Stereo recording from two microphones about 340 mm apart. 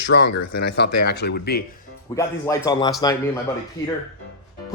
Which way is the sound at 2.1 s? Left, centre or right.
Centre.